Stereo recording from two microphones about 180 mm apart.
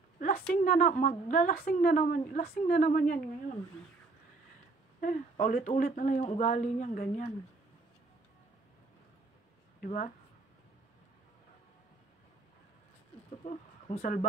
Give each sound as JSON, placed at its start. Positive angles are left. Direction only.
{"t": 0.6, "sound": "a woman's voice", "side_deg": 50}
{"t": 5.0, "sound": "a woman's voice", "side_deg": 45}
{"t": 9.8, "sound": "speech", "side_deg": 45}
{"t": 13.4, "sound": "speech", "side_deg": 35}